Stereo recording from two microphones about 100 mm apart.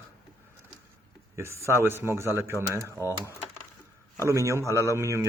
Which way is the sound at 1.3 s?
30° right (ahead or behind).